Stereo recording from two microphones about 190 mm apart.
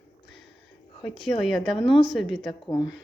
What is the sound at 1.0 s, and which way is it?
A woman's voice, centre (ahead or behind).